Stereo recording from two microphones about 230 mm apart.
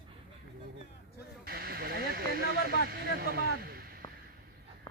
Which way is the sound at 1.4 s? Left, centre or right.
Right.